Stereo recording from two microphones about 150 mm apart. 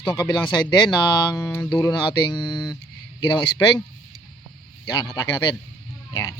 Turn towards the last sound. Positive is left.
turn(degrees=25)  # may be behind; listen again after turning